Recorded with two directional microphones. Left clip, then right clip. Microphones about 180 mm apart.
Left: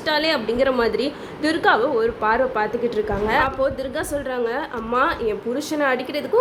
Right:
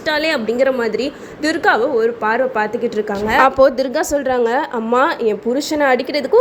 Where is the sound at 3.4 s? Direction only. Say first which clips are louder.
Right 9 dB; 40° right (ahead or behind); by 6.4 s 25° right (ahead or behind).